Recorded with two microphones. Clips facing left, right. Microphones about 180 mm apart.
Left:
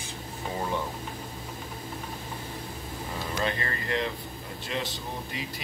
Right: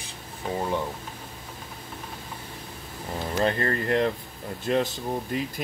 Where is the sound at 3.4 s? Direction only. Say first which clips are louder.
Right 7 dB; 45° right (ahead or behind).